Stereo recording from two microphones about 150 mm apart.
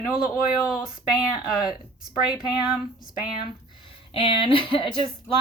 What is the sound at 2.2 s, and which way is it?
Speech, 5° right (ahead or behind).